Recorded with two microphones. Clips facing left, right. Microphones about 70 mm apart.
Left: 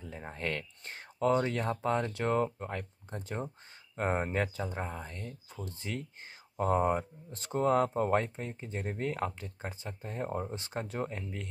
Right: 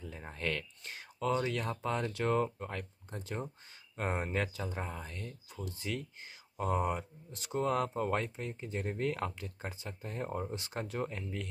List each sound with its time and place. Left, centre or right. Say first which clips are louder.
0.0 s speech: left 1 dB; centre
10.5 s speech: left 1 dB; left